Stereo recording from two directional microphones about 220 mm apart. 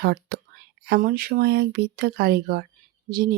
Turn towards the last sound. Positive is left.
turn(degrees=-45)  # may be behind; listen again after turning